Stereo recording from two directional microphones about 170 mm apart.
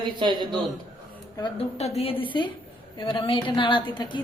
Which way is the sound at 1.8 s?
35° left (ahead or behind).